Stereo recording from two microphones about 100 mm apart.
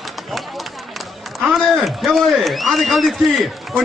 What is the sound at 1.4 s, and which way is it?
A man's voice, centre (ahead or behind).